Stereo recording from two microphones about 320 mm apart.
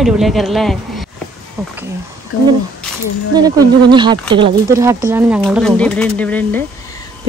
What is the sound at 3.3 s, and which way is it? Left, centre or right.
Speech, centre.